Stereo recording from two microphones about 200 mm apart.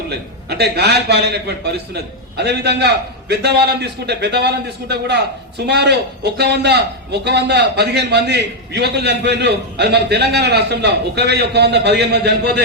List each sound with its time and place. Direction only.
0.1 s a man's voice: 55° right (ahead or behind)